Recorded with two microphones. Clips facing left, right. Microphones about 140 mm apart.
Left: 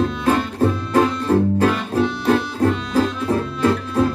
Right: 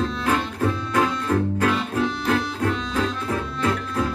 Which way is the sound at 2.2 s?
30° left (ahead or behind).